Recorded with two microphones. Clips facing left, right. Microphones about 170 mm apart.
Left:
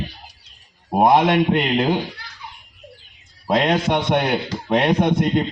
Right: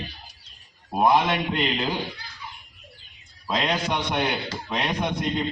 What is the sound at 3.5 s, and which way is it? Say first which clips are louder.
A man's voice: left 7 dB; 55° left (ahead or behind).